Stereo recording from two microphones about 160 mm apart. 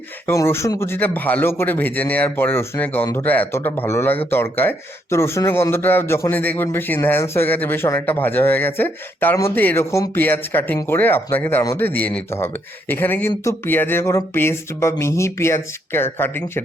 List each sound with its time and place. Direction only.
0.3 s speech: 15° left (ahead or behind)